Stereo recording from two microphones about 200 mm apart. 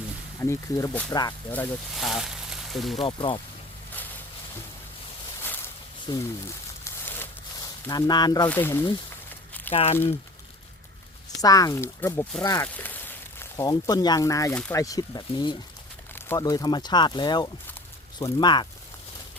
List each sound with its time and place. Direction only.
0.3 s speech: 15° left (ahead or behind)
2.0 s a sound: centre (ahead or behind)
3.0 s speech: 25° left (ahead or behind)
5.4 s boat: 10° left (ahead or behind)
6.1 s speech: 20° left (ahead or behind)
6.8 s crumpling: 10° left (ahead or behind)
7.9 s speech: 20° left (ahead or behind)
9.7 s speech: 30° left (ahead or behind)
11.3 s speech: 20° left (ahead or behind)
14.5 s speech: 5° left (ahead or behind)
14.8 s speech: 15° left (ahead or behind)